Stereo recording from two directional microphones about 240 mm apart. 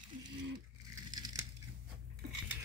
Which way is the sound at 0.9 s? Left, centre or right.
Centre.